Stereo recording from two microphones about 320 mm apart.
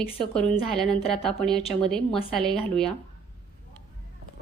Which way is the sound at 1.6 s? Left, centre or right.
Centre.